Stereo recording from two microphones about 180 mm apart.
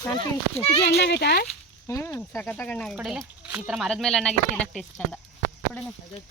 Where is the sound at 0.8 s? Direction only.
65° left (ahead or behind).